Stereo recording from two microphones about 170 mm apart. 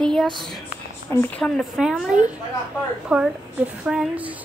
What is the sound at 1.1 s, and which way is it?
A woman's voice, 10° left (ahead or behind).